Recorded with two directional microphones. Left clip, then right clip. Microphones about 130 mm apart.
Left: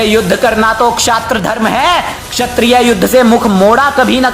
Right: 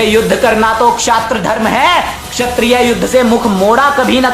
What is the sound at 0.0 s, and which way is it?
A woman's voice, 30° left (ahead or behind).